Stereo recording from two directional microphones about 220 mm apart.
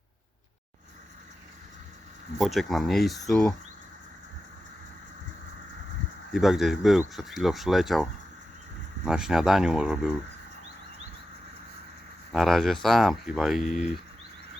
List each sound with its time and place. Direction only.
2.4 s speech: centre (ahead or behind)
6.3 s speech: centre (ahead or behind)
9.0 s speech: 5° right (ahead or behind)
12.3 s speech: centre (ahead or behind)